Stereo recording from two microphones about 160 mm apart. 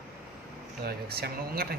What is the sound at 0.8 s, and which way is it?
Speech, 75° right (ahead or behind).